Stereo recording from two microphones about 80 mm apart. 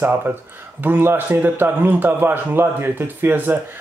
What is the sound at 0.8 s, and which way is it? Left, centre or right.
Speech, right.